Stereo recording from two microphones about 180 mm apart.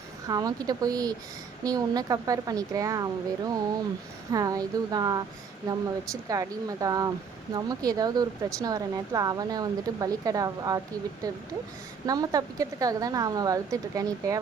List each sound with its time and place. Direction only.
0.3 s a woman's voice: 20° right (ahead or behind)
12.0 s a woman's voice: 20° right (ahead or behind)